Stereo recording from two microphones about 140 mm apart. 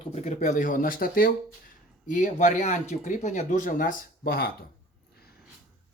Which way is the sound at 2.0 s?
65° left (ahead or behind).